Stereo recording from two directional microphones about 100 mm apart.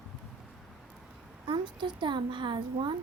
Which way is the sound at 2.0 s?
50° right (ahead or behind).